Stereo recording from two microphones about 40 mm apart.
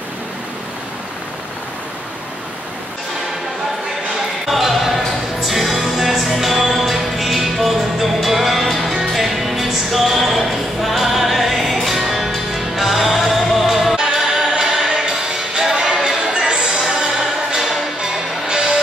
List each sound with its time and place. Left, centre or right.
4.5 s music: centre